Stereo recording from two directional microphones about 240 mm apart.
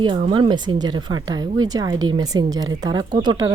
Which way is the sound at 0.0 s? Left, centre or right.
Right.